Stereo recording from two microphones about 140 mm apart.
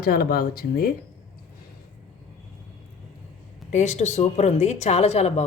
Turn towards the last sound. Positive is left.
turn(degrees=50)  # may be behind; listen again after turning